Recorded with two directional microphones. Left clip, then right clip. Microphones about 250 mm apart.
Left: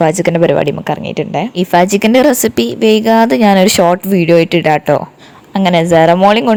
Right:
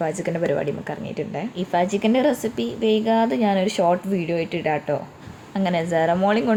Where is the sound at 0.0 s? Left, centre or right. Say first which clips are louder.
Left 13 dB; left.